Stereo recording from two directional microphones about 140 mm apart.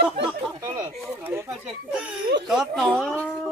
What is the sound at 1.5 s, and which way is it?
Speech, 5° right (ahead or behind).